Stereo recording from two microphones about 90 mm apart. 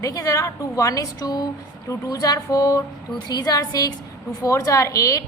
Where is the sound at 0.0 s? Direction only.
40° left (ahead or behind).